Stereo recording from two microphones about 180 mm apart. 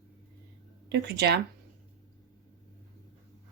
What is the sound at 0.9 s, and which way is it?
Speech, 65° right (ahead or behind).